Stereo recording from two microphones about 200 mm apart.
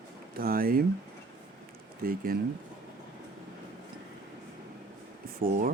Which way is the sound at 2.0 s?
45° right (ahead or behind).